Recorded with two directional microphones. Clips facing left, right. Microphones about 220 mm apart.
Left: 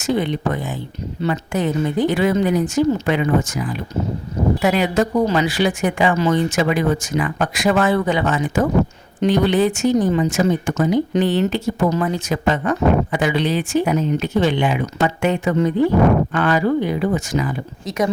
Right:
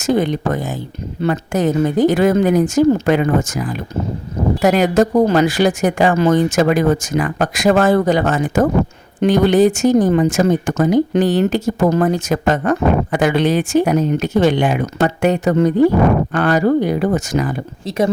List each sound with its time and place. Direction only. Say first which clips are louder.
0.0 s speech: right 3 dB; 45° right (ahead or behind)
17.8 s speech: right 3 dB; 30° right (ahead or behind)